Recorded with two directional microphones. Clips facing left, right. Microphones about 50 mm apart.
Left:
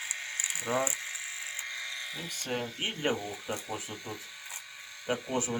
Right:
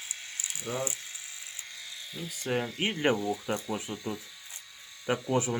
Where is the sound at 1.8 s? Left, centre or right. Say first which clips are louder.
Left 3 dB; left.